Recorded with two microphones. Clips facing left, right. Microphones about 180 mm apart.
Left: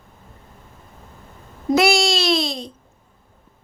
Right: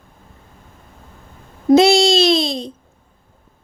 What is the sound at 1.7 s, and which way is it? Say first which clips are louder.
Babbling: right 6 dB; 20° right (ahead or behind).